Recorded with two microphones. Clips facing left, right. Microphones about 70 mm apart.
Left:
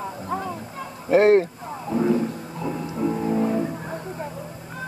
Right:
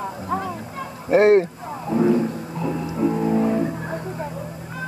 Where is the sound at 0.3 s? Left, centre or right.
Right.